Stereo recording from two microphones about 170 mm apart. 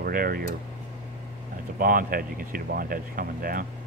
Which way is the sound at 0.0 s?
60° right (ahead or behind).